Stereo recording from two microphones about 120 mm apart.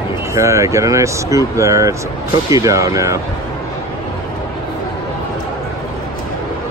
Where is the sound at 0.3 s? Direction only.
25° right (ahead or behind).